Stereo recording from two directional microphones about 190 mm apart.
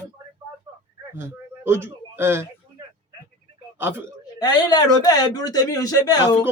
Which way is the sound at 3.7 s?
10° right (ahead or behind).